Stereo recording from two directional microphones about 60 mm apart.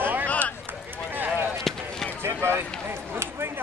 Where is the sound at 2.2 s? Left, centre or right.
Right.